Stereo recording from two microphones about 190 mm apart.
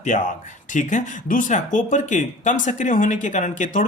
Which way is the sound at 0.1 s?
45° left (ahead or behind).